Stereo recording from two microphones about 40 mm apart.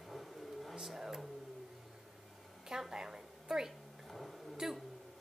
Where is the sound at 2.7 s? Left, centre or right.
Centre.